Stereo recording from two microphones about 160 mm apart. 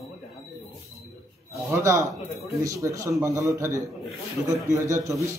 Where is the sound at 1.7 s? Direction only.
20° right (ahead or behind).